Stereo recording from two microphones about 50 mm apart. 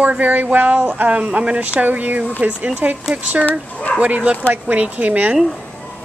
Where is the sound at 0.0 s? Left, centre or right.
Right.